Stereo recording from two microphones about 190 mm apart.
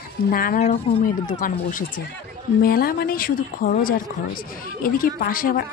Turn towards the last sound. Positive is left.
turn(degrees=50)  # may be behind; listen again after turning